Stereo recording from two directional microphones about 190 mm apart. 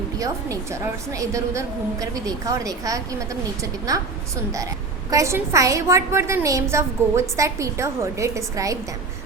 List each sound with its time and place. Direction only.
0.2 s a woman's voice: 15° right (ahead or behind)
5.1 s a woman's voice: 15° right (ahead or behind)